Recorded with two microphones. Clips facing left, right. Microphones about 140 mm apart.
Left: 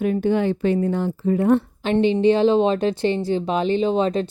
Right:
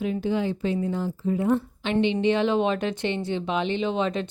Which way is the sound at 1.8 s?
40° left (ahead or behind).